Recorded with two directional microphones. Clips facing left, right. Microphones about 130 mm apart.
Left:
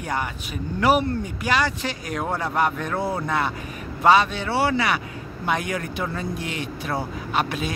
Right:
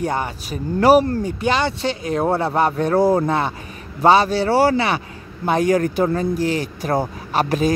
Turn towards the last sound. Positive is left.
turn(degrees=-40)  # may be behind; listen again after turning